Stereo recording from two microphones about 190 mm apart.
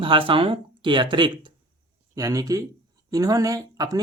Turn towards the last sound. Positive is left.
turn(degrees=-20)  # may be behind; listen again after turning